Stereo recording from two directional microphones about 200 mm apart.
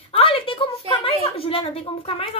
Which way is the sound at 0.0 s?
30° left (ahead or behind).